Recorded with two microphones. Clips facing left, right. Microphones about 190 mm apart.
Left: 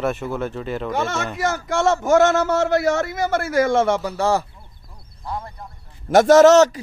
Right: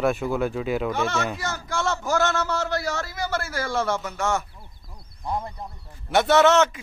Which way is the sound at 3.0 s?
20° left (ahead or behind).